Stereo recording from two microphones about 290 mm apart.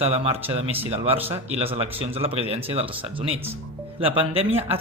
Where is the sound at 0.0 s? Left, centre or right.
Centre.